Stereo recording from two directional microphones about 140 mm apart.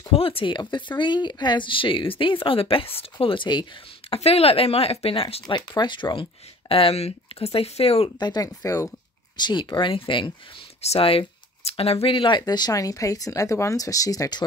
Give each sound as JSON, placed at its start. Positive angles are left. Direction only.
{"t": 0.1, "sound": "speech", "side_deg": 40}
{"t": 4.1, "sound": "speech", "side_deg": 45}
{"t": 8.2, "sound": "speech", "side_deg": 30}